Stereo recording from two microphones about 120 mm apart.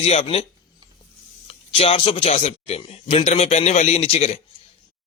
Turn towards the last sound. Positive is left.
turn(degrees=60)  # may be behind; listen again after turning